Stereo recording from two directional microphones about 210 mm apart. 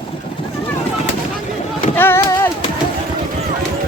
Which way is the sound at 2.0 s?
10° left (ahead or behind).